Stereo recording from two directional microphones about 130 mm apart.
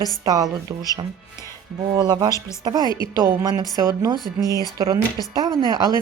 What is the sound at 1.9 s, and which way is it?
Music, 30° right (ahead or behind).